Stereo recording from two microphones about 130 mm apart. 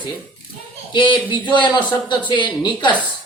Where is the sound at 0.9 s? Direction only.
40° left (ahead or behind).